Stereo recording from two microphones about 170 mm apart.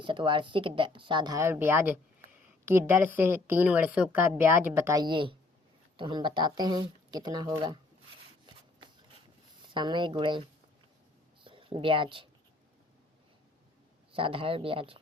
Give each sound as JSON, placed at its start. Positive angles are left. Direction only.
{"t": 0.0, "sound": "a woman's voice", "side_deg": -30}
{"t": 9.6, "sound": "speech", "side_deg": -25}
{"t": 11.4, "sound": "speech", "side_deg": -30}
{"t": 14.1, "sound": "speech", "side_deg": -30}